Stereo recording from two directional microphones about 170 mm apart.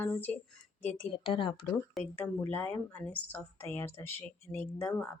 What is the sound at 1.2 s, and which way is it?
Speech, 30° left (ahead or behind).